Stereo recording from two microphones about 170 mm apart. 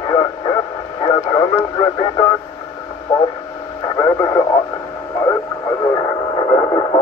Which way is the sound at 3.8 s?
25° left (ahead or behind).